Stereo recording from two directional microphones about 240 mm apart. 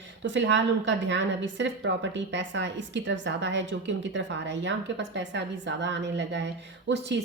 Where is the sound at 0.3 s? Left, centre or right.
Right.